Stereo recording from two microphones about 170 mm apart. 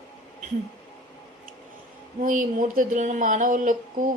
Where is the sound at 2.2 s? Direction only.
50° right (ahead or behind).